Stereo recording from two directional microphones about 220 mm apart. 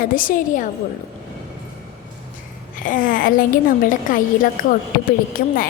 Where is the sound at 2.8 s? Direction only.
40° left (ahead or behind).